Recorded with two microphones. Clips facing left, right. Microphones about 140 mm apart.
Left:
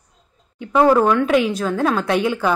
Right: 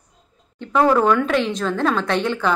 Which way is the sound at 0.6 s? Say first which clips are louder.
Left 2 dB; 15° left (ahead or behind).